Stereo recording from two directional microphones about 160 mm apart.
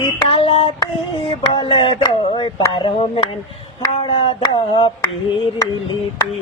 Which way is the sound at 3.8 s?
35° left (ahead or behind).